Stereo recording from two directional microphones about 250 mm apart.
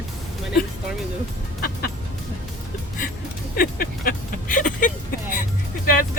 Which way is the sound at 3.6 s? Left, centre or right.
Left.